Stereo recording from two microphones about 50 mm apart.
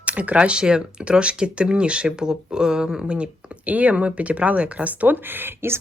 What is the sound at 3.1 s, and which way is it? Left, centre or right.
Speech, right.